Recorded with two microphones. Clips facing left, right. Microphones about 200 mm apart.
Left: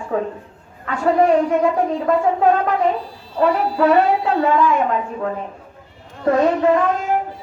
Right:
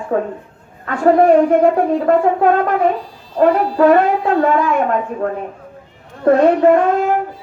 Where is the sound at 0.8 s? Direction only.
50° right (ahead or behind).